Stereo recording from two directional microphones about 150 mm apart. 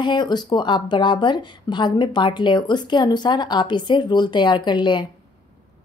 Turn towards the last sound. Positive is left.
turn(degrees=30)  # may be behind; listen again after turning